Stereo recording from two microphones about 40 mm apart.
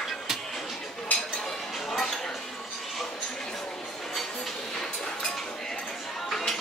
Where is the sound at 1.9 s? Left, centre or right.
Centre.